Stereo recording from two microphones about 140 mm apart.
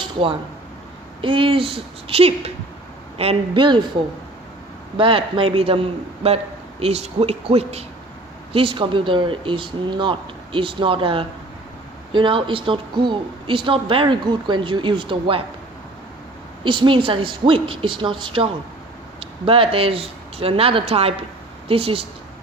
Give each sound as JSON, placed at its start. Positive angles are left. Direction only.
{"t": 0.0, "sound": "a sound", "side_deg": -35}
{"t": 1.2, "sound": "speech", "side_deg": -35}
{"t": 4.9, "sound": "a man's voice", "side_deg": -40}
{"t": 16.6, "sound": "a man's voice", "side_deg": -35}